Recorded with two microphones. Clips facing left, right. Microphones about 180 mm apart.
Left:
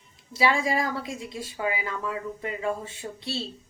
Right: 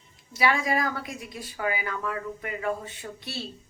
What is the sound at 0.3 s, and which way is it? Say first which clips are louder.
A woman's voice: left 1 dB; 25° left (ahead or behind).